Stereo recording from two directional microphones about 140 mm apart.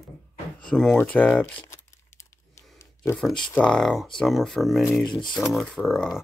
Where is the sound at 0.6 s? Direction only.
5° left (ahead or behind); by 2.6 s 20° left (ahead or behind).